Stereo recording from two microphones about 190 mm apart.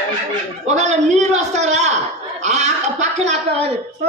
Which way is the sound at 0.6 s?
35° right (ahead or behind).